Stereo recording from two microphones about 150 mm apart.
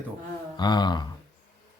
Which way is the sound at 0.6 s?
30° left (ahead or behind).